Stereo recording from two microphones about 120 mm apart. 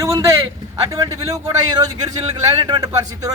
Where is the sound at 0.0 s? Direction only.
25° right (ahead or behind).